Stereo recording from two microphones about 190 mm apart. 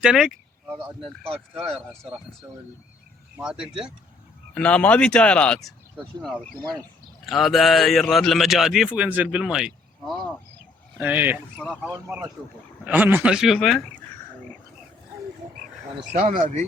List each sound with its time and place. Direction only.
0.0 s speech: 5° right (ahead or behind)
1.3 s speech: 30° right (ahead or behind)
3.3 s a man's voice: 5° right (ahead or behind)
4.5 s a man's voice: 5° left (ahead or behind); by 11.3 s 10° right (ahead or behind)
11.5 s a man's voice: 5° left (ahead or behind)
11.9 s a man's voice: 10° right (ahead or behind)
16.2 s speech: 40° right (ahead or behind)